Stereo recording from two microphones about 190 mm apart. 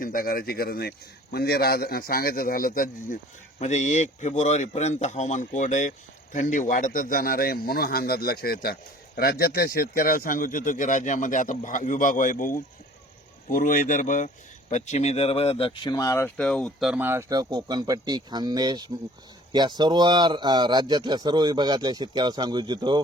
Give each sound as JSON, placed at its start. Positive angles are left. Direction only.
{"t": 0.0, "sound": "a man's voice", "side_deg": 50}
{"t": 16.9, "sound": "speech", "side_deg": -10}